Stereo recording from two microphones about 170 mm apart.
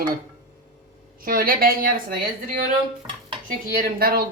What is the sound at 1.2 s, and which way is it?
Speech, 60° right (ahead or behind).